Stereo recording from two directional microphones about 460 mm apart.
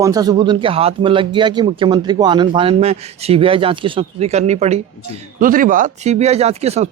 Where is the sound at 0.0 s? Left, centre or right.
Centre.